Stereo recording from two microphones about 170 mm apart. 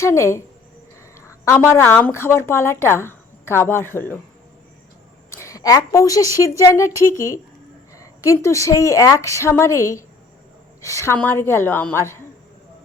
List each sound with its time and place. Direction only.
0.0 s speech: 15° left (ahead or behind)
1.5 s speech: 15° left (ahead or behind)
5.3 s a woman's voice: 15° left (ahead or behind)